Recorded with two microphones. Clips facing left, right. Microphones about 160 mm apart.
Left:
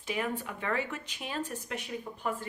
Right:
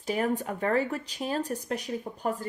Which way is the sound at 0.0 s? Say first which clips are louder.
Right 6 dB; 40° right (ahead or behind).